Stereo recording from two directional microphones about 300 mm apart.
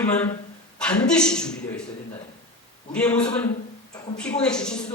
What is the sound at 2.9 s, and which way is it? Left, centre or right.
Speech, centre.